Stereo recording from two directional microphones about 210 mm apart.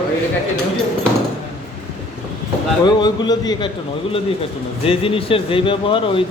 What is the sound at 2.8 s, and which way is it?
Speech, 20° left (ahead or behind).